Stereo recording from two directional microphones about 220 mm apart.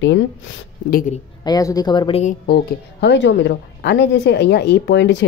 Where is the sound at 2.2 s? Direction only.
40° left (ahead or behind).